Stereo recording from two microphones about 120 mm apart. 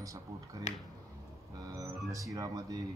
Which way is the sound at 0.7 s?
75° left (ahead or behind).